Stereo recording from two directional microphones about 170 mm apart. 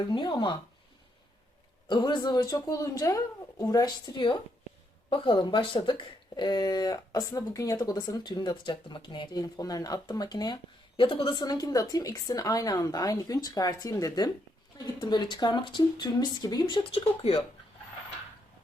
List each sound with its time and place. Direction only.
0.0 s speech: 25° left (ahead or behind)
1.9 s speech: 25° left (ahead or behind)